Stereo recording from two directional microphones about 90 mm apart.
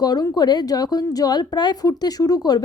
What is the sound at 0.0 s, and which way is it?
A woman's voice, 50° left (ahead or behind).